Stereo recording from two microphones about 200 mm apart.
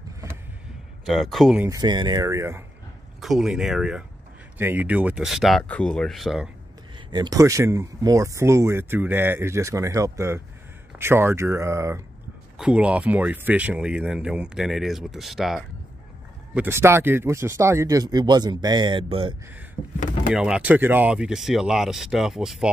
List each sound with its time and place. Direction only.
1.0 s speech: centre (ahead or behind)
1.6 s speech: 20° right (ahead or behind)
3.2 s speech: centre (ahead or behind)
7.1 s speech: 20° right (ahead or behind); by 15.6 s centre (ahead or behind)
16.5 s speech: 10° right (ahead or behind)
19.8 s speech: centre (ahead or behind)